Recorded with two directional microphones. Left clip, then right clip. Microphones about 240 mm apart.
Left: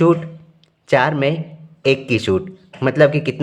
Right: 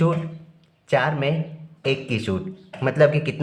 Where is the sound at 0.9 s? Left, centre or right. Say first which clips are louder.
Left 6 dB; left.